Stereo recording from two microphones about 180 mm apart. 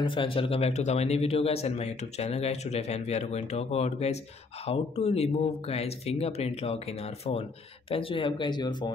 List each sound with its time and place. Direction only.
0.0 s a man's voice: 30° left (ahead or behind)